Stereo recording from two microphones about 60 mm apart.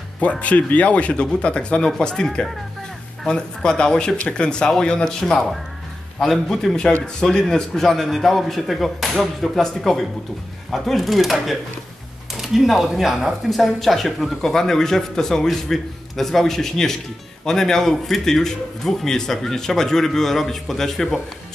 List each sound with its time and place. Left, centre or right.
0.2 s a man's voice: left